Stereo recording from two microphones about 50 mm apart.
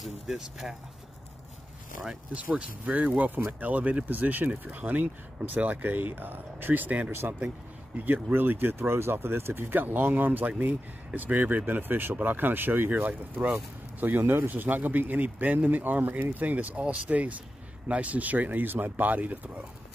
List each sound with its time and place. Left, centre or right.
0.3 s speech: centre
2.3 s speech: right
7.1 s speech: right
8.0 s speech: right